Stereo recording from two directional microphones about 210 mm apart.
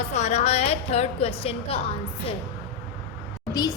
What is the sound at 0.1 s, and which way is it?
A woman's voice, 35° left (ahead or behind).